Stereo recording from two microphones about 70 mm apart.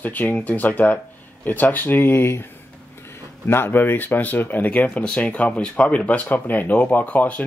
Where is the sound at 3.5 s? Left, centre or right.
Left.